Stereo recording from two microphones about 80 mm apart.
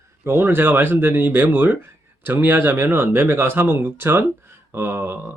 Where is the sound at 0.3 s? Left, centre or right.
Right.